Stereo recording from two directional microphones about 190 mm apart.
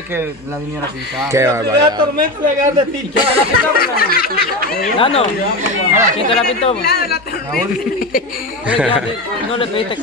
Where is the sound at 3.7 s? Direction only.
50° left (ahead or behind).